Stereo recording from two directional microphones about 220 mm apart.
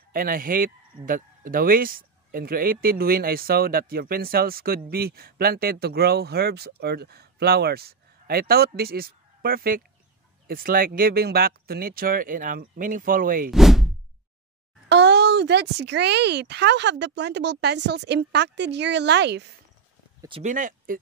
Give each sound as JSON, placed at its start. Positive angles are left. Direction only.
{"t": 0.1, "sound": "speech", "side_deg": -40}
{"t": 13.5, "sound": "speech", "side_deg": 0}
{"t": 14.9, "sound": "speech", "side_deg": -50}
{"t": 20.2, "sound": "speech", "side_deg": -25}